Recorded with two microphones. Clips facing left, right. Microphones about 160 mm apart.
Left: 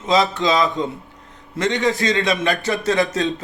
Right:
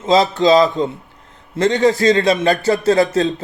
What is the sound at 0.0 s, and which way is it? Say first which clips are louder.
A man's voice: right 4 dB; 35° right (ahead or behind).